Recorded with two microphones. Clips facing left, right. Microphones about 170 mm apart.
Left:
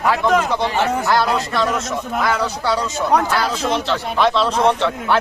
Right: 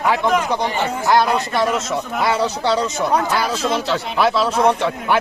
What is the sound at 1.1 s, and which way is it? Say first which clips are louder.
Speech: right 1 dB; 25° right (ahead or behind).